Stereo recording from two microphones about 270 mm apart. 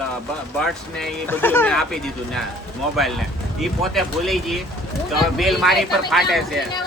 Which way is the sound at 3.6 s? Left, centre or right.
Centre.